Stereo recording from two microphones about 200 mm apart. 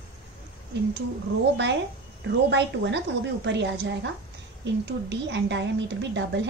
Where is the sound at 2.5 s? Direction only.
60° right (ahead or behind).